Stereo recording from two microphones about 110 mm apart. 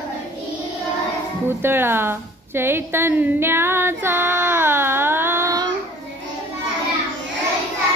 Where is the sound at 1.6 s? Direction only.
20° right (ahead or behind).